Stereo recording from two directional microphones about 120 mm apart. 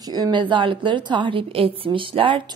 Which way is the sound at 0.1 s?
35° right (ahead or behind).